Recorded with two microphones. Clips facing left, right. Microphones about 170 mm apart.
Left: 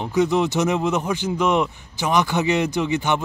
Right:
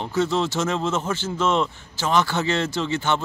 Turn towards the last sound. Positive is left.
turn(degrees=15)  # may be behind; listen again after turning